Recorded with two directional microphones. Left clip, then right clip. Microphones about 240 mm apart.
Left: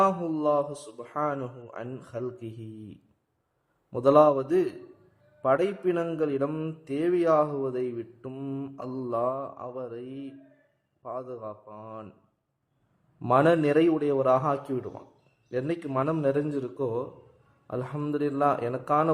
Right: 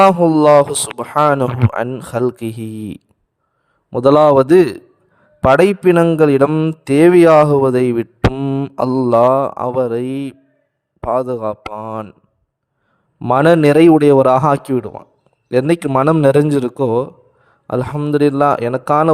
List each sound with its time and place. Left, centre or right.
0.0 s a man's voice: right
13.1 s a man's voice: right